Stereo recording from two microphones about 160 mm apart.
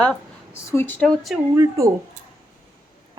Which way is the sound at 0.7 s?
15° left (ahead or behind).